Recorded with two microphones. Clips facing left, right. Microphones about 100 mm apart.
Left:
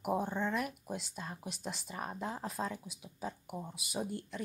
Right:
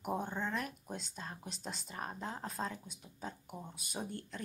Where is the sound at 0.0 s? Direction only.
10° left (ahead or behind).